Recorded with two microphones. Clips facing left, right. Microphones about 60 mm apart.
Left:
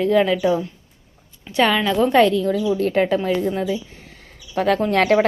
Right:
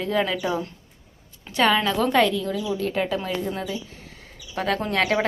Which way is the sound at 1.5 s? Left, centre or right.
Left.